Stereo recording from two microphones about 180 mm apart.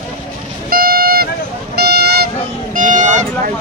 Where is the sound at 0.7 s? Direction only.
55° right (ahead or behind).